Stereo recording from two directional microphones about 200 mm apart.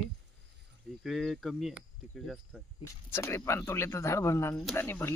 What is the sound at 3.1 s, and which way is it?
Speech, 15° left (ahead or behind).